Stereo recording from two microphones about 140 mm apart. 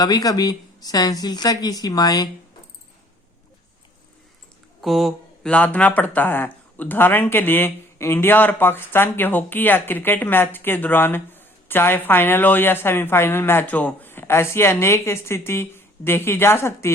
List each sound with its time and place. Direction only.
0.0 s speech: 25° left (ahead or behind)
4.8 s speech: centre (ahead or behind); by 16.9 s 20° left (ahead or behind)